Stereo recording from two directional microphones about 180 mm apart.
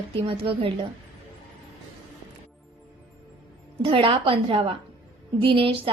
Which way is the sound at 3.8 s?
30° right (ahead or behind).